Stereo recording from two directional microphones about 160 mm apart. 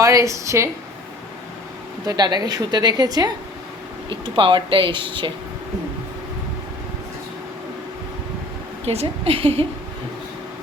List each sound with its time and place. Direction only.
0.0 s a woman's voice: 20° right (ahead or behind)
2.0 s a woman's voice: 25° right (ahead or behind)
8.8 s speech: 40° right (ahead or behind)